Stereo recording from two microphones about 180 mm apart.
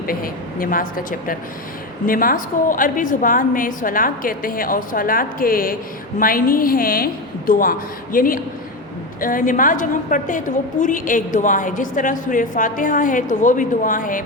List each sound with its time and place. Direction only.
0.1 s a woman's voice: 50° left (ahead or behind)